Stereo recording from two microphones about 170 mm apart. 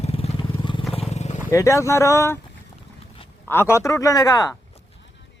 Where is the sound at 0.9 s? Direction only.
35° left (ahead or behind).